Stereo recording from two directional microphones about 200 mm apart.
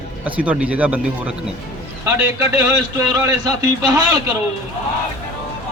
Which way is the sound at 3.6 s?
20° right (ahead or behind).